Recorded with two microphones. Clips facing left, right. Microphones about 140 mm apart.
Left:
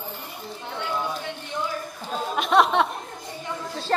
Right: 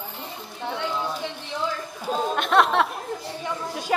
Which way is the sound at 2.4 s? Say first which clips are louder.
Left 2 dB; centre (ahead or behind).